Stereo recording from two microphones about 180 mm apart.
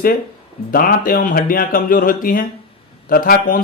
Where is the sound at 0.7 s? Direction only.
50° left (ahead or behind).